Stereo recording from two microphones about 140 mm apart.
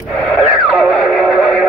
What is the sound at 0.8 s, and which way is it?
Music, centre (ahead or behind).